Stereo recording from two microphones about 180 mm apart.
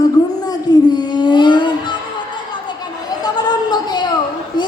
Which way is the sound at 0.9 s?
25° left (ahead or behind).